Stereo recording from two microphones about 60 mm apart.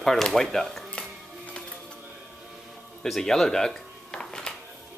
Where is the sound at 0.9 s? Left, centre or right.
Centre.